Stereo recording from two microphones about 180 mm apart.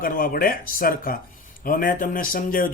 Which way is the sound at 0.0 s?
50° left (ahead or behind).